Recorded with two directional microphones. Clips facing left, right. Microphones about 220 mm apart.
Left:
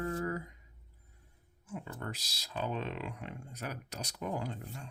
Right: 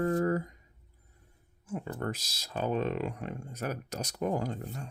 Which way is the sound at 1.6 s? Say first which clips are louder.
Right 7 dB; 50° right (ahead or behind).